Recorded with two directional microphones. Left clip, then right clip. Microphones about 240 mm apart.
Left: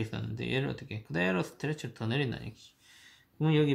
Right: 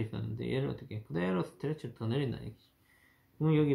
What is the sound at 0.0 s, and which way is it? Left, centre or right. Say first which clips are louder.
Speech: left 2 dB; left.